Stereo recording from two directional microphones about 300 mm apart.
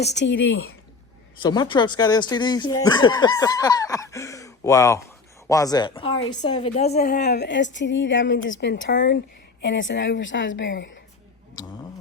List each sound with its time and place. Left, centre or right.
0.0 s a woman's voice: left
1.4 s a woman's voice: centre; by 11.0 s left